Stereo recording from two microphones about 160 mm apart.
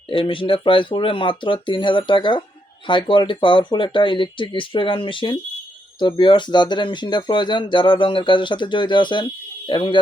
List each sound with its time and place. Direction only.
0.1 s speech: 30° left (ahead or behind)